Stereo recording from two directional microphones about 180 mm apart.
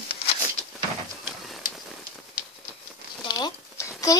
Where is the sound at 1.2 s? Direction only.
Centre (ahead or behind).